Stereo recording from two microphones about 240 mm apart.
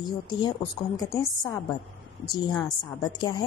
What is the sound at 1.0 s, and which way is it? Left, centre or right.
A woman's voice, centre.